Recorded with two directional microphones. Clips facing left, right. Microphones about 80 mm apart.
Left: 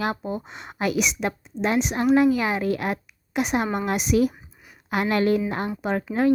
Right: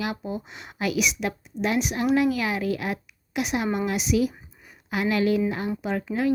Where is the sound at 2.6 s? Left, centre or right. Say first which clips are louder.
Left 2 dB; left.